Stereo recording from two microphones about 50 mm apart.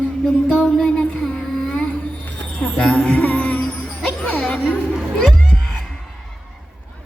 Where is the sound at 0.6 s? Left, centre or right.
Centre.